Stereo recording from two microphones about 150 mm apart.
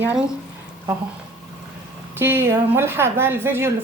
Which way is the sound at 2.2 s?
15° right (ahead or behind).